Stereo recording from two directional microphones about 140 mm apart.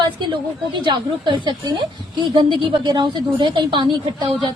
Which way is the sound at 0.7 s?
35° right (ahead or behind).